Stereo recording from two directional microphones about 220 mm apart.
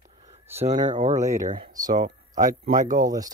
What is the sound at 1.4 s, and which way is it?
Speech, 25° right (ahead or behind).